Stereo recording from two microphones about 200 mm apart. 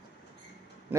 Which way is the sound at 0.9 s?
10° right (ahead or behind).